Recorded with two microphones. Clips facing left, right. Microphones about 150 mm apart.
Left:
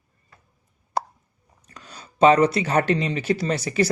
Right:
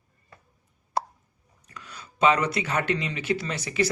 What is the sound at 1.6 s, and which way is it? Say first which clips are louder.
Speech: left 1 dB; 35° left (ahead or behind).